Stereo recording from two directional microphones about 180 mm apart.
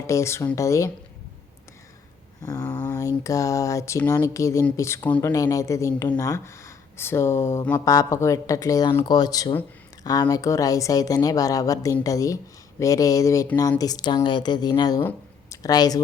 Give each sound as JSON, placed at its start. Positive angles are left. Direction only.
{"t": 0.1, "sound": "speech", "side_deg": 15}
{"t": 2.4, "sound": "a sound", "side_deg": 20}
{"t": 3.2, "sound": "speech", "side_deg": 20}